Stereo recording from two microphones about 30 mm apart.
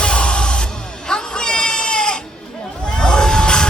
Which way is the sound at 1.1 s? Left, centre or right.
Left.